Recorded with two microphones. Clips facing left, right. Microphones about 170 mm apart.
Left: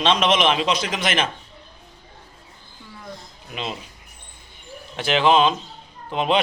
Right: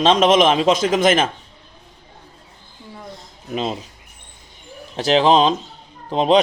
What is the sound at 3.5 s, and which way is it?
Speech, 40° right (ahead or behind).